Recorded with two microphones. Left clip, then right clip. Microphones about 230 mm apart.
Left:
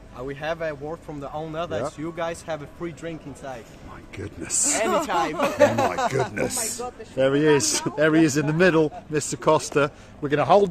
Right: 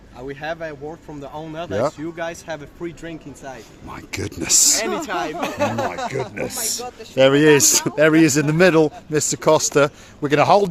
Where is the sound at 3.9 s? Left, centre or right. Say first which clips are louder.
Right 8 dB; right.